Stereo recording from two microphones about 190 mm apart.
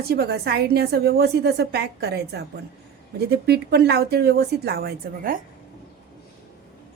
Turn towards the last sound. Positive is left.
turn(degrees=-50)  # may be behind; listen again after turning